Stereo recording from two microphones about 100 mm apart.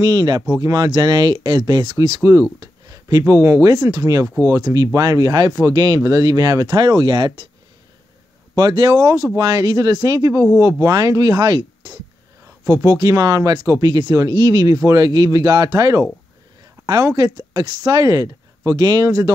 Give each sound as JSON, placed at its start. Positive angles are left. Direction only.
{"t": 0.0, "sound": "speech", "side_deg": -40}
{"t": 8.5, "sound": "speech", "side_deg": -45}